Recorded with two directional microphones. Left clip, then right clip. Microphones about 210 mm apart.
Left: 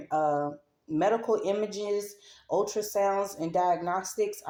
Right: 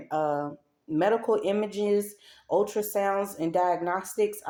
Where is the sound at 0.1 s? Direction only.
30° right (ahead or behind).